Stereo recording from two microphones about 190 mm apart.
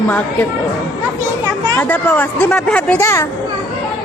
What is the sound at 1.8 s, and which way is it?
Speech, 10° left (ahead or behind).